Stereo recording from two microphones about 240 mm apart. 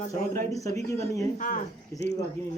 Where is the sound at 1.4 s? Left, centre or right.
Left.